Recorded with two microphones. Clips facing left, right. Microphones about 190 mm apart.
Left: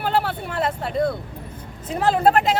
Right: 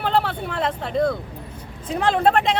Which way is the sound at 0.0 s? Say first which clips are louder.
Right 1 dB; 5° left (ahead or behind).